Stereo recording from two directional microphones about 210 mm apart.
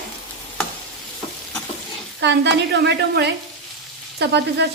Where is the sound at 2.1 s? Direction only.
55° right (ahead or behind).